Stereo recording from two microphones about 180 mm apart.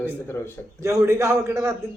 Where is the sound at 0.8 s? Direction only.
15° right (ahead or behind).